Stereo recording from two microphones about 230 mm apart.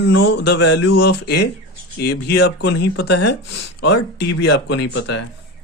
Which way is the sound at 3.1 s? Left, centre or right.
Left.